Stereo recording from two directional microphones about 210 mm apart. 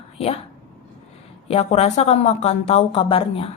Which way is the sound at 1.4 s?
30° left (ahead or behind).